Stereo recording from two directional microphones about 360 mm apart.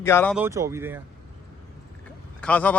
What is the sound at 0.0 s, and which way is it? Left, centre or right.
Speech, centre.